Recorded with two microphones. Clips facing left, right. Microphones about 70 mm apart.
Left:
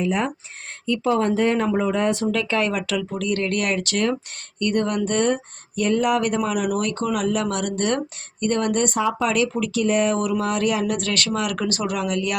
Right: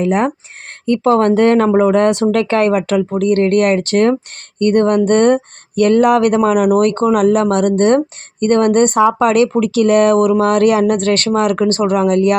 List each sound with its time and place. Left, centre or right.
0.0 s speech: right